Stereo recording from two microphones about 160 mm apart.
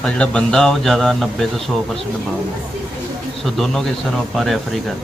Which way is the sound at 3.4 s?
Centre (ahead or behind).